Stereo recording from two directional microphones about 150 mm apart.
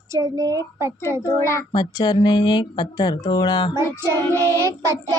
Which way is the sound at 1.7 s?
30° left (ahead or behind).